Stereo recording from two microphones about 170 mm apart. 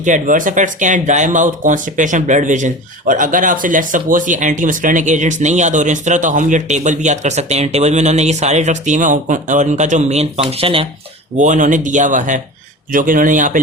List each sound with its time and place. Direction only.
0.0 s speech: 50° right (ahead or behind); by 10.8 s 35° right (ahead or behind)
11.3 s speech: 45° right (ahead or behind)